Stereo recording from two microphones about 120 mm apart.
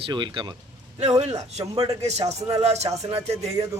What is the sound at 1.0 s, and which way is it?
A man's voice, 65° right (ahead or behind).